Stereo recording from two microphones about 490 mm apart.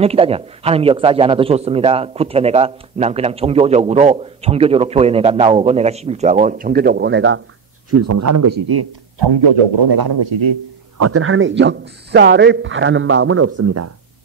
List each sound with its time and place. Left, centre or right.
0.0 s a man's voice: centre; by 10.2 s right
11.0 s speech: right